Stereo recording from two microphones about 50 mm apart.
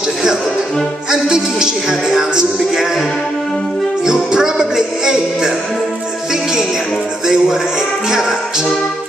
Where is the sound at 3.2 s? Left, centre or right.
Centre.